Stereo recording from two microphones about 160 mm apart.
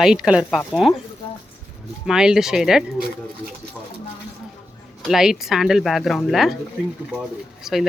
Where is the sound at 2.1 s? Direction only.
5° right (ahead or behind).